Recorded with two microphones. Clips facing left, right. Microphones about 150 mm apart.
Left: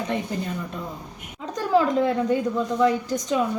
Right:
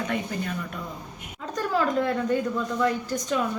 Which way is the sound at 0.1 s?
25° left (ahead or behind).